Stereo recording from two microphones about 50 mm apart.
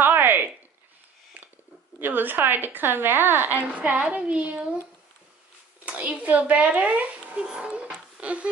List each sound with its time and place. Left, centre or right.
0.0 s a sound: right
2.0 s a woman's voice: right
3.6 s a woman's voice: right
5.9 s a child's voice: right